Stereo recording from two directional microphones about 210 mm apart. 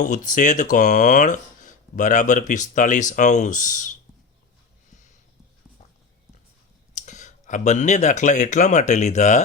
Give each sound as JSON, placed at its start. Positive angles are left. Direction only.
{"t": 0.0, "sound": "speech", "side_deg": 35}
{"t": 4.9, "sound": "a sound", "side_deg": 35}
{"t": 6.9, "sound": "speech", "side_deg": 35}